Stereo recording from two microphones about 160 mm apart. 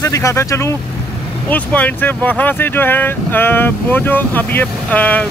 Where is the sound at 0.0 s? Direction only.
20° left (ahead or behind).